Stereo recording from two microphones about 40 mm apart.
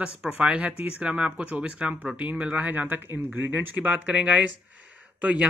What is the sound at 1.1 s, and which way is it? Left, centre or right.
Speech, right.